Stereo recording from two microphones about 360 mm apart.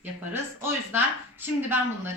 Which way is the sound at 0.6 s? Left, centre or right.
Centre.